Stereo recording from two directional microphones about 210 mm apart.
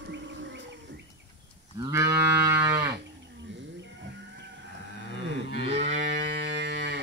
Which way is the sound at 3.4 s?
60° right (ahead or behind).